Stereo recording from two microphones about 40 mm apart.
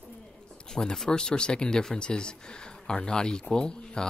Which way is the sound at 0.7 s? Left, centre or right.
Centre.